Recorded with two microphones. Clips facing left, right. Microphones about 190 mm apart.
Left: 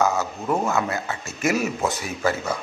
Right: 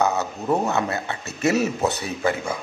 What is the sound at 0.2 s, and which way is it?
Speech, 20° right (ahead or behind).